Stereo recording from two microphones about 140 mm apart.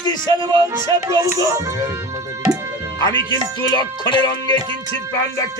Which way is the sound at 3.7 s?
35° left (ahead or behind).